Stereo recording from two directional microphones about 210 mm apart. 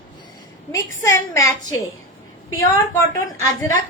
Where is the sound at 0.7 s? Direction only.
15° left (ahead or behind).